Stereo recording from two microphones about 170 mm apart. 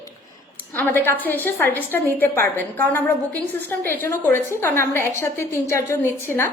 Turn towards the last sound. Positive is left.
turn(degrees=15)  # may be behind; listen again after turning